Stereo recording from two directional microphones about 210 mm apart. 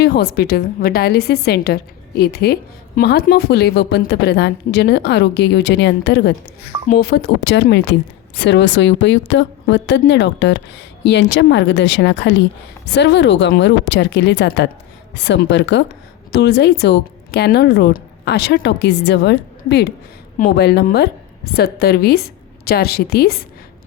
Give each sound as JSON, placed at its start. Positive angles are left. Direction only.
{"t": 0.0, "sound": "a woman's voice", "side_deg": 50}